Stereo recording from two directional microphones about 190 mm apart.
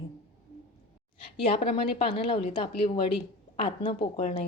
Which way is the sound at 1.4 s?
30° left (ahead or behind).